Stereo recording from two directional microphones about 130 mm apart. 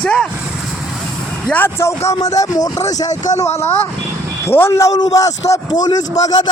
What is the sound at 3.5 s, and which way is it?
A man's voice, 15° left (ahead or behind).